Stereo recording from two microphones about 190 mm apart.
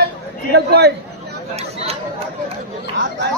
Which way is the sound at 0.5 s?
60° right (ahead or behind).